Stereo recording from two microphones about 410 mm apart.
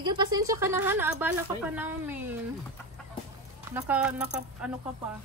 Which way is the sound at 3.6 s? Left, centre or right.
Centre.